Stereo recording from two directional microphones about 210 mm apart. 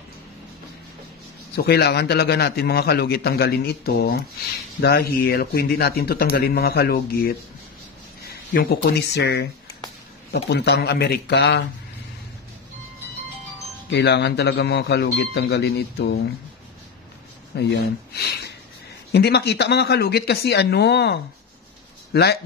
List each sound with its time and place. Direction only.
1.5 s a man's voice: 50° left (ahead or behind)
10.5 s a man's voice: 55° left (ahead or behind)
13.8 s a man's voice: 55° left (ahead or behind)
17.6 s a man's voice: 50° left (ahead or behind)